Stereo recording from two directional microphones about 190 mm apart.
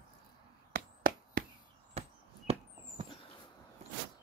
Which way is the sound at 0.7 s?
45° right (ahead or behind).